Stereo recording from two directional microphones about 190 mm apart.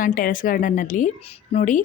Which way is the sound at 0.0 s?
45° left (ahead or behind).